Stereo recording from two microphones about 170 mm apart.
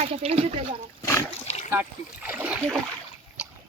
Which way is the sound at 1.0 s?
20° left (ahead or behind).